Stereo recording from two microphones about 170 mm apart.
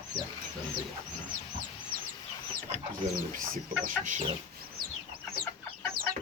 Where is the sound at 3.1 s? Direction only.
55° right (ahead or behind).